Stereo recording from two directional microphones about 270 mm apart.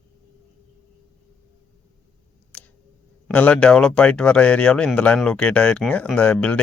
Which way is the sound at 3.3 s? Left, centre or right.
Centre.